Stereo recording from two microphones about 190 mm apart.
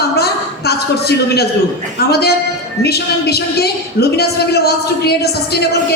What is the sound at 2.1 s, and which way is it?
A man's voice, 55° left (ahead or behind).